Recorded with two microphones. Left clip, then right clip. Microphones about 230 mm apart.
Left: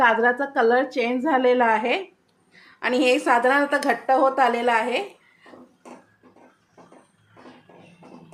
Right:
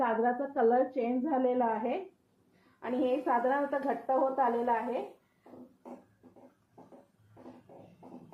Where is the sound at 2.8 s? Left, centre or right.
Left.